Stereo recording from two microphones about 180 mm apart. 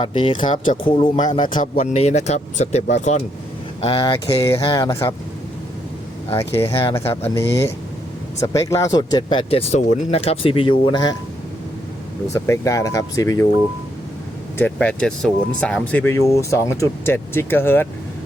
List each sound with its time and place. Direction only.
0.0 s speech: 25° left (ahead or behind)
0.5 s speech: 45° left (ahead or behind)
0.9 s speech: 30° left (ahead or behind)
1.5 s speech: 50° left (ahead or behind)
3.8 s speech: 25° left (ahead or behind)
6.3 s speech: 15° left (ahead or behind)
12.3 s speech: 15° left (ahead or behind)
14.6 s speech: 5° left (ahead or behind)